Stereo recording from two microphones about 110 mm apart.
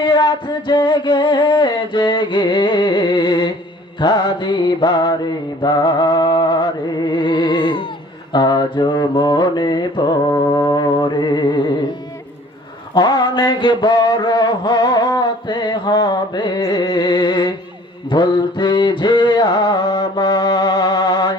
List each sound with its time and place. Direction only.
0.0 s mantra: 45° left (ahead or behind)
5.6 s music: 40° left (ahead or behind)
8.3 s mantra: 40° left (ahead or behind)
10.9 s music: 50° left (ahead or behind)
12.9 s mantra: 40° left (ahead or behind)
19.4 s music: 35° left (ahead or behind)